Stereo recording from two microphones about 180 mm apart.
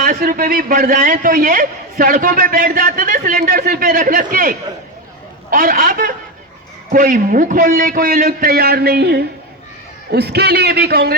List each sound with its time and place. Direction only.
0.0 s a man's voice: 50° right (ahead or behind); by 11.1 s 65° right (ahead or behind)